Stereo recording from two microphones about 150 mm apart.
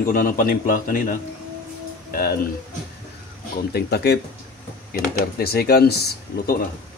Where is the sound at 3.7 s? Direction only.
90° left.